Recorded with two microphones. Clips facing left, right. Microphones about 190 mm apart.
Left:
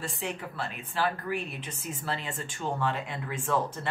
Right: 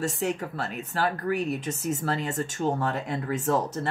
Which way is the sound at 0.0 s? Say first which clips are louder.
Right 7 dB; 45° right (ahead or behind).